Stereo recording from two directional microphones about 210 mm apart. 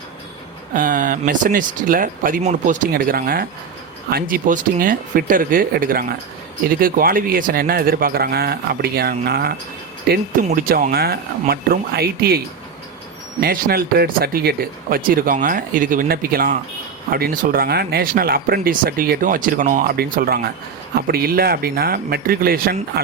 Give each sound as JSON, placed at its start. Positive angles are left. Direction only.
{"t": 0.7, "sound": "speech", "side_deg": -40}
{"t": 13.4, "sound": "speech", "side_deg": -45}